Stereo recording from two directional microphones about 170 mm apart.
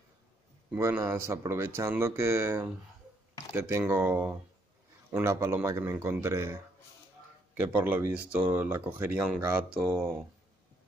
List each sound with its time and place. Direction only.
0.7 s speech: 15° right (ahead or behind)